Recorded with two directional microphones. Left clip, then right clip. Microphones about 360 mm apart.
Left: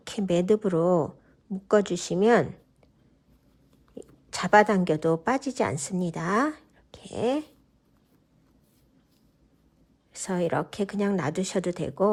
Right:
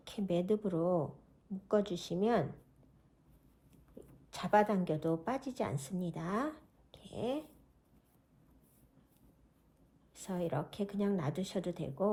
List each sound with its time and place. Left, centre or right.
0.0 s a woman's voice: left
4.3 s a woman's voice: left
10.1 s a woman's voice: left